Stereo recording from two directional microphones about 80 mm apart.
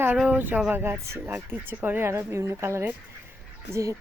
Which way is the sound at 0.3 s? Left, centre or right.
Right.